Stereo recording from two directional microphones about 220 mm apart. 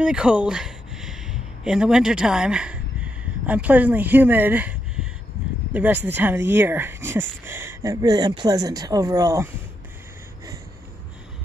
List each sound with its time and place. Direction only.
0.0 s speech: 5° right (ahead or behind)